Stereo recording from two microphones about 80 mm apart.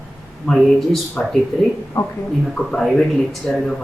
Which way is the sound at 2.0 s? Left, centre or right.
Left.